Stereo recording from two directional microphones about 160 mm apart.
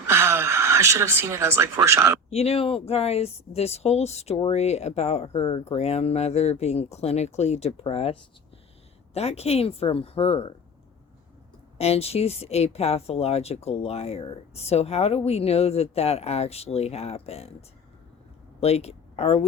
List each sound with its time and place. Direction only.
0.1 s speech: 15° right (ahead or behind)
2.3 s speech: 40° left (ahead or behind)
11.8 s speech: 40° left (ahead or behind)
18.6 s speech: 40° left (ahead or behind)